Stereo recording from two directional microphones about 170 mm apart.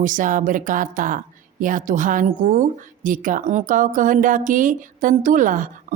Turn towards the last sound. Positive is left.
turn(degrees=-50)  # may be behind; listen again after turning